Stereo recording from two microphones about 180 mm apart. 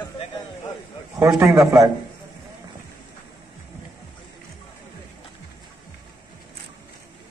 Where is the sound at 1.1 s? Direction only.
15° right (ahead or behind).